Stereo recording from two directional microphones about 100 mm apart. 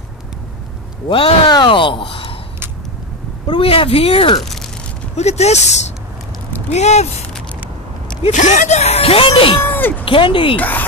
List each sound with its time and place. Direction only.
1.0 s a man's voice: 60° left (ahead or behind)
3.4 s speech: 65° left (ahead or behind)
5.1 s speech: 90° left
8.2 s speech: 90° left; by 9.6 s 65° left (ahead or behind)
9.6 s speech: 20° left (ahead or behind)
10.0 s a man's voice: 60° left (ahead or behind)
10.6 s speech: 15° left (ahead or behind)